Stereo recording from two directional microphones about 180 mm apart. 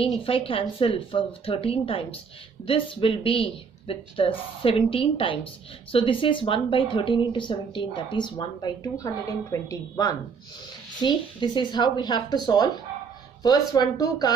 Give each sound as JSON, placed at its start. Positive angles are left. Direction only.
{"t": 0.0, "sound": "speech", "side_deg": 30}